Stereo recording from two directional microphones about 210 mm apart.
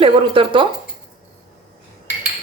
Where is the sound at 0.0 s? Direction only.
25° right (ahead or behind).